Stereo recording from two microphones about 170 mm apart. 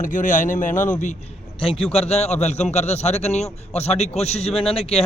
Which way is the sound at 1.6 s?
35° left (ahead or behind).